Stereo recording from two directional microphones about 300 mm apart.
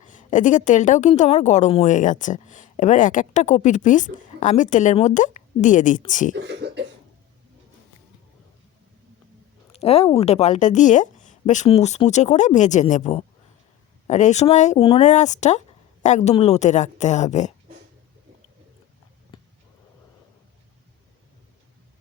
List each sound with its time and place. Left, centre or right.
0.0 s a woman's voice: left
6.4 s speech: right
9.7 s a woman's voice: centre